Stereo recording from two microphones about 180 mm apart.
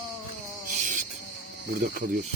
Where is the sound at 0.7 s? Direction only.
45° right (ahead or behind).